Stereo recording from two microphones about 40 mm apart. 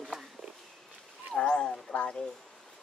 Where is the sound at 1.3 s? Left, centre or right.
Left.